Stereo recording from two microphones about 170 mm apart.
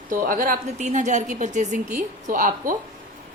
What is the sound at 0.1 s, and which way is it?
A woman's voice, 55° right (ahead or behind).